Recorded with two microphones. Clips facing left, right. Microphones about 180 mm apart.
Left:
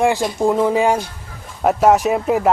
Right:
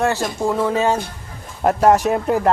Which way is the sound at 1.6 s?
Centre (ahead or behind).